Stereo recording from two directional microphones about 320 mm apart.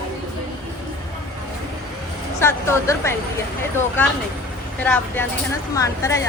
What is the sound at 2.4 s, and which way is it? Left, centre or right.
Speech, centre.